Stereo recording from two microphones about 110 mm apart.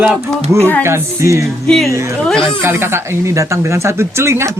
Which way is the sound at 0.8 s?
25° right (ahead or behind).